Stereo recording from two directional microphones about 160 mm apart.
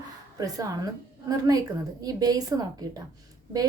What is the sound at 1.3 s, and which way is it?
A woman's voice, 25° right (ahead or behind).